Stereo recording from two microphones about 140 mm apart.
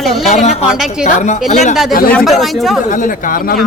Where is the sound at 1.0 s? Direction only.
60° left (ahead or behind).